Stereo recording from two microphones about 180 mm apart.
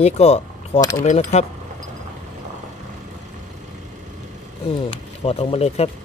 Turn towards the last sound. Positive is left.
turn(degrees=35)  # may be behind; listen again after turning